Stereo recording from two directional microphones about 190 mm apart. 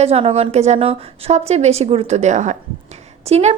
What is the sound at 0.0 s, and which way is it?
A woman's voice, 30° right (ahead or behind).